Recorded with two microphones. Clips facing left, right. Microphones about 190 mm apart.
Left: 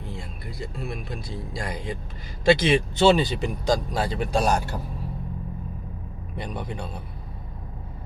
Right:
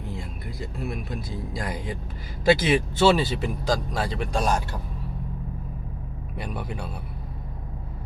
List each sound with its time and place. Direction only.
0.0 s speech: centre (ahead or behind)
6.3 s speech: 5° right (ahead or behind)